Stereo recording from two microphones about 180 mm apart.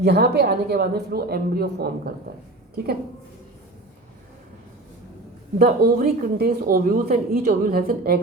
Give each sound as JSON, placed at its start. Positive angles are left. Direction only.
{"t": 0.0, "sound": "a woman's voice", "side_deg": -65}
{"t": 5.5, "sound": "speech", "side_deg": -55}